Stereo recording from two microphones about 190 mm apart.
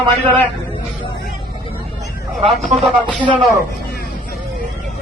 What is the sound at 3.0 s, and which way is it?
Speech, 25° right (ahead or behind).